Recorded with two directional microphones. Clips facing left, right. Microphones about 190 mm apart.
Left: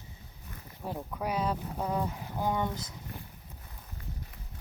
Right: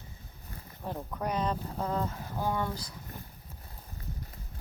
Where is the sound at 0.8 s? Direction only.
5° left (ahead or behind).